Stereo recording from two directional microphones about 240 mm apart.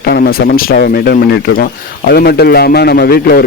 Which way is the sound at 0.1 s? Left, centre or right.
Left.